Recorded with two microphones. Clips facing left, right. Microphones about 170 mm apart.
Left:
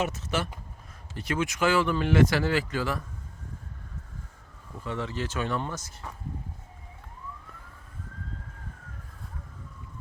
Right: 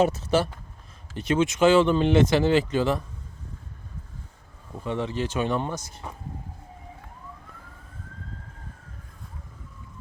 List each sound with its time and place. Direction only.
0.0 s speech: 30° right (ahead or behind)
4.8 s speech: 20° right (ahead or behind)